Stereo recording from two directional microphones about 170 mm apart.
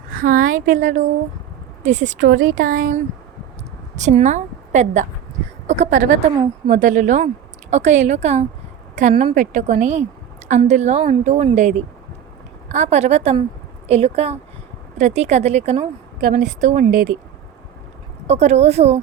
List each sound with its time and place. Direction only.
0.1 s a woman's voice: 55° right (ahead or behind)
16.9 s speech: 65° right (ahead or behind)
18.3 s a woman's voice: 40° right (ahead or behind)